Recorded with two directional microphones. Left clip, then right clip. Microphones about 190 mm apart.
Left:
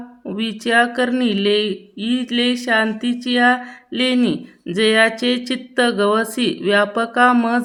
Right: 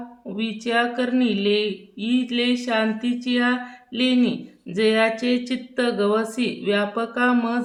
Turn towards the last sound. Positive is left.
turn(degrees=45)  # may be behind; listen again after turning